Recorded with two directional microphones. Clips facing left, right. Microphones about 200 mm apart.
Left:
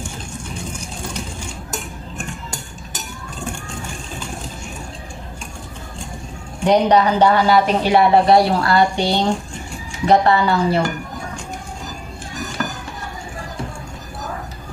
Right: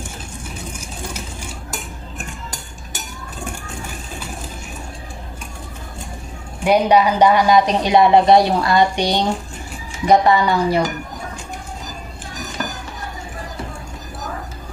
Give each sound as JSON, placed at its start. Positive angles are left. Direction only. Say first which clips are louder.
{"t": 6.6, "sound": "speech", "louder": "even", "side_deg": -10}